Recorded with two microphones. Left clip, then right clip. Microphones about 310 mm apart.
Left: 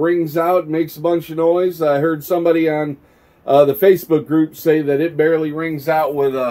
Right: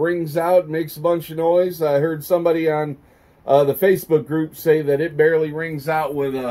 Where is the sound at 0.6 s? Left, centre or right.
Left.